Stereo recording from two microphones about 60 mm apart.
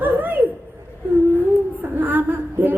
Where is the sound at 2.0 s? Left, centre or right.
Right.